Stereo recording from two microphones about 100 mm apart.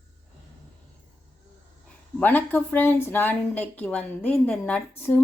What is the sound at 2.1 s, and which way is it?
Speech, 15° left (ahead or behind).